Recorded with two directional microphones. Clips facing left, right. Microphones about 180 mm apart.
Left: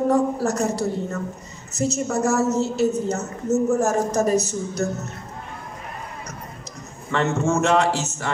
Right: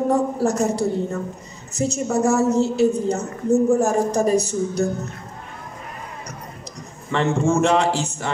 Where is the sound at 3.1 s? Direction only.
30° right (ahead or behind).